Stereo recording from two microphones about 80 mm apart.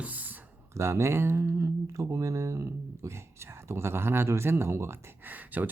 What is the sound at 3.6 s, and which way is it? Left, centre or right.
Speech, right.